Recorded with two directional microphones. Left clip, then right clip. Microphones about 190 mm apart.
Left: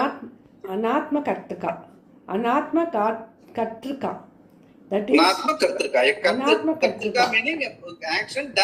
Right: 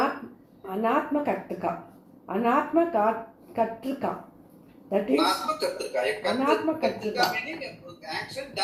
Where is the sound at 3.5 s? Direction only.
45° left (ahead or behind).